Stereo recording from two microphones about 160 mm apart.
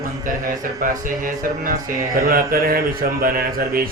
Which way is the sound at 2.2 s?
65° right (ahead or behind).